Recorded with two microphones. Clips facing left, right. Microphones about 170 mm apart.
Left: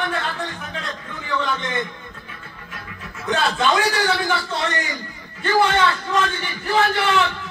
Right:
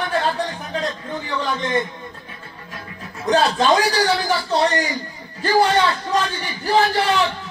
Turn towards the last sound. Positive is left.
turn(degrees=-35)  # may be behind; listen again after turning